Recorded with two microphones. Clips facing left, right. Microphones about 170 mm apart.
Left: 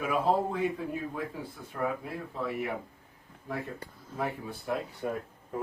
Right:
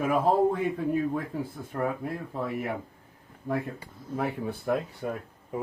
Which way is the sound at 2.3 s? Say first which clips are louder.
Right 1 dB; 50° right (ahead or behind).